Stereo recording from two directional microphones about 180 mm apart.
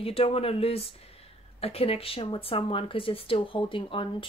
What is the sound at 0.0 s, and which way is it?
Speech, 35° left (ahead or behind).